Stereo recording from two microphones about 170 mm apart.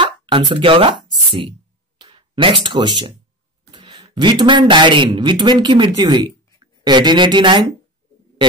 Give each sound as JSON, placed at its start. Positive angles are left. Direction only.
{"t": 0.0, "sound": "speech", "side_deg": -35}